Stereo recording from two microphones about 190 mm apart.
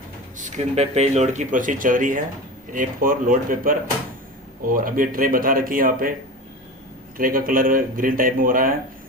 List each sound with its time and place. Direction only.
0.3 s speech: 40° right (ahead or behind)
7.2 s speech: 50° right (ahead or behind)